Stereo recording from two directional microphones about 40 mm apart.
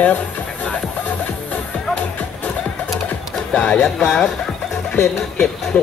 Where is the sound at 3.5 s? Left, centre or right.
Left.